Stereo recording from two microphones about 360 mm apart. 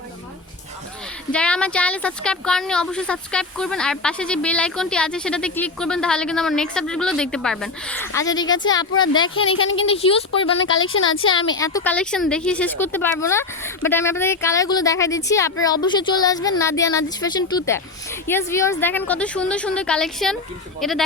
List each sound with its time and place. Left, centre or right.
1.3 s speech: centre
9.6 s a woman's voice: left
9.8 s a woman's voice: centre
10.8 s a woman's voice: left
11.6 s a woman's voice: centre